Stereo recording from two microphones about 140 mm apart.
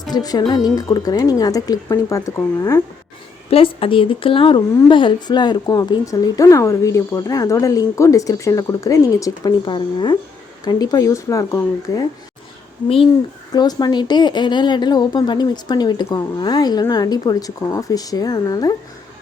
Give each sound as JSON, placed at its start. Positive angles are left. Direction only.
{"t": 0.1, "sound": "speech", "side_deg": 30}
{"t": 3.5, "sound": "speech", "side_deg": 40}
{"t": 13.5, "sound": "speech", "side_deg": 30}